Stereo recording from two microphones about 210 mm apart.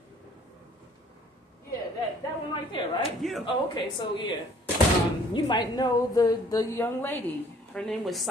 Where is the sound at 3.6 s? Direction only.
20° left (ahead or behind).